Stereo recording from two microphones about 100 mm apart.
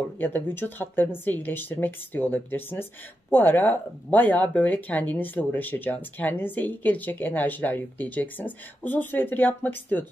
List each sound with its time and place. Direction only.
0.2 s speech: 20° left (ahead or behind)